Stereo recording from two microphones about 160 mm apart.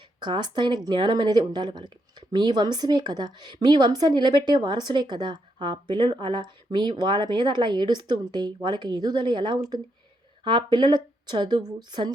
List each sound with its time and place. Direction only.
0.2 s speech: 30° right (ahead or behind)